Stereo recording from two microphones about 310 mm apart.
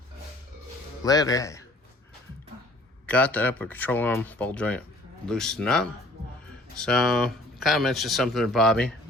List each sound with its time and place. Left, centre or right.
1.0 s speech: centre
3.1 s speech: centre